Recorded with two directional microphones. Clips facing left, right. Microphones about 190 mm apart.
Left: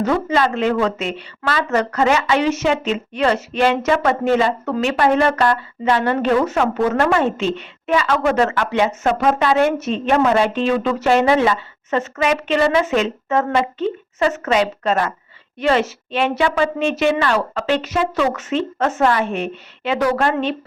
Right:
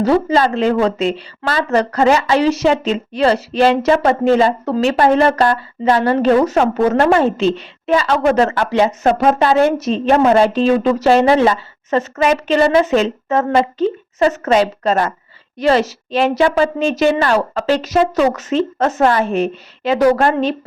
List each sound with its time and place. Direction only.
0.0 s a woman's voice: 35° right (ahead or behind)